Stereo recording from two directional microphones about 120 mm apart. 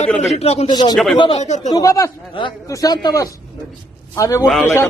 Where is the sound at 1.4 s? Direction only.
80° left.